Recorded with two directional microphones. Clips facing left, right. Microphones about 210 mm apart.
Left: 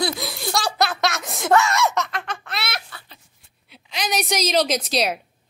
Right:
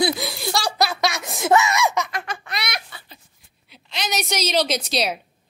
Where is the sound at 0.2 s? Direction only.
Centre (ahead or behind).